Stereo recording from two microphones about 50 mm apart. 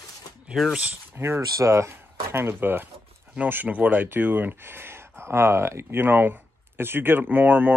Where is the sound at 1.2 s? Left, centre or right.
Right.